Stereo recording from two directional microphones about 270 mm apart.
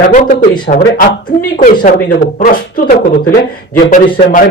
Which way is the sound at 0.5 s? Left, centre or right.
Centre.